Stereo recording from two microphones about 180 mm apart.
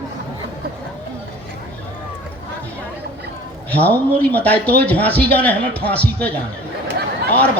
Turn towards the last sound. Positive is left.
turn(degrees=-65)  # may be behind; listen again after turning